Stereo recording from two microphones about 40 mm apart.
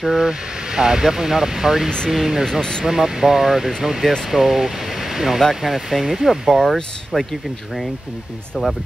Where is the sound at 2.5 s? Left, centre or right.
Centre.